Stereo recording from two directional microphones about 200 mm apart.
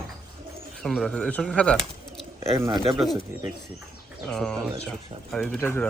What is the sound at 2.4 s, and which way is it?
Speech, 15° right (ahead or behind).